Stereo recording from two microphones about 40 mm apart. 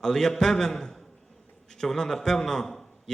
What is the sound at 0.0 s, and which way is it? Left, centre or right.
A man's voice, centre.